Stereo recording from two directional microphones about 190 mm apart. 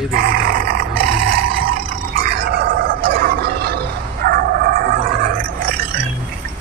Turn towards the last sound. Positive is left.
turn(degrees=-50)  # may be behind; listen again after turning